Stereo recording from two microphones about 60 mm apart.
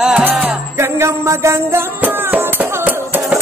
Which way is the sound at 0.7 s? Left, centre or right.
Right.